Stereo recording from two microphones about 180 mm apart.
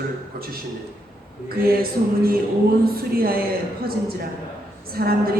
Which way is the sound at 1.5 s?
55° right (ahead or behind).